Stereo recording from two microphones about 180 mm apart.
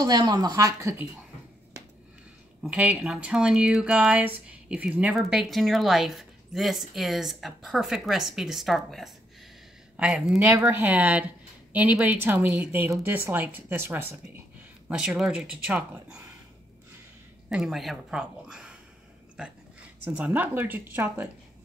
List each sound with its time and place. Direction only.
0.0 s speech: 20° right (ahead or behind)
2.6 s speech: 5° right (ahead or behind)
17.5 s speech: 5° right (ahead or behind)
20.1 s speech: 10° right (ahead or behind)